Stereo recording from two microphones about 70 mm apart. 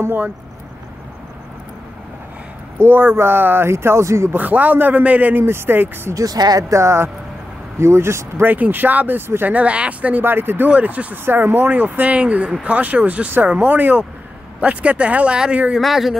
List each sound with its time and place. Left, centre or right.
0.0 s speech: right
2.8 s speech: right
4.3 s speech: right
5.4 s speech: right
6.1 s speech: right
6.7 s speech: right
8.5 s speech: right
10.2 s speech: right; by 15.6 s centre
15.8 s speech: centre